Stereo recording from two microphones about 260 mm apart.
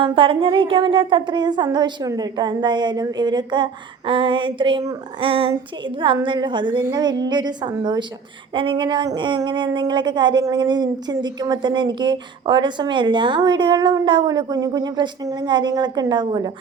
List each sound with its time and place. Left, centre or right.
0.0 s speech: centre